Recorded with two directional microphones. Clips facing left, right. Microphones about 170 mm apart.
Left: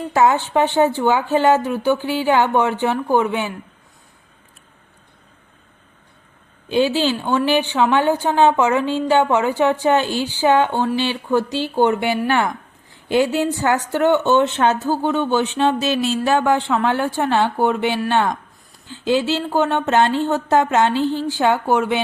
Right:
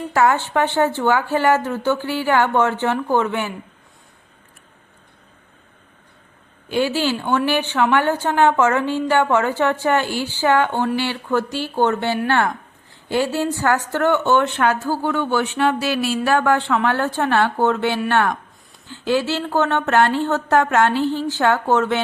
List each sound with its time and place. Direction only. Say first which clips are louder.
0.1 s a woman's voice: left 2 dB; 20° left (ahead or behind)
6.7 s a woman's voice: left 2 dB; 20° left (ahead or behind)